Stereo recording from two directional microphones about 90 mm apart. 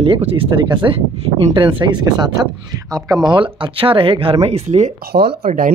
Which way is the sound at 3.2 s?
65° right (ahead or behind).